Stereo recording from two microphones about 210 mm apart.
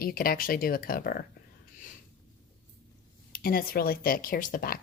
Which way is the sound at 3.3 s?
45° left (ahead or behind).